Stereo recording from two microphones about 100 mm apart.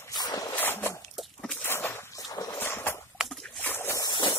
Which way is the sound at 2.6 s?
20° left (ahead or behind).